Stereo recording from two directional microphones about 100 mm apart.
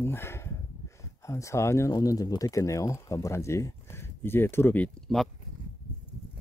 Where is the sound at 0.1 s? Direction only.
25° left (ahead or behind).